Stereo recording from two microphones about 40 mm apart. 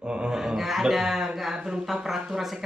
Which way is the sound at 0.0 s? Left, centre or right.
Right.